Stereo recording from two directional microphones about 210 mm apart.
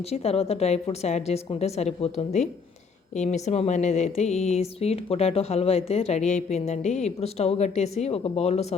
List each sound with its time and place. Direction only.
0.1 s speech: 30° left (ahead or behind)